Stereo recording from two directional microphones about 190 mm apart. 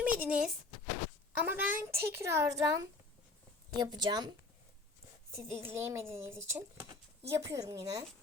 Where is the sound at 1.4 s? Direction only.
10° right (ahead or behind).